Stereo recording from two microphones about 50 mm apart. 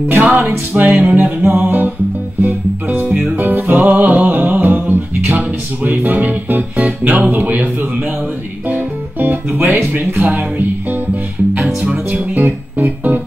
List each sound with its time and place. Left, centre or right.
0.1 s music: right
11.8 s music: right
12.4 s music: right